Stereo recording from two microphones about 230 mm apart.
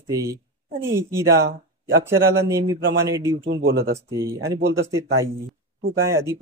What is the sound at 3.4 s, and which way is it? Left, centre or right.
Speech, right.